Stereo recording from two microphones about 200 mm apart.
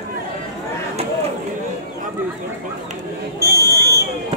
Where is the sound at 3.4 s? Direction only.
50° right (ahead or behind).